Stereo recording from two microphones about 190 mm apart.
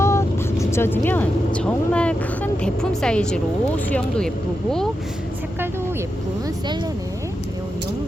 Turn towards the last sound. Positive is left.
turn(degrees=-25)  # may be behind; listen again after turning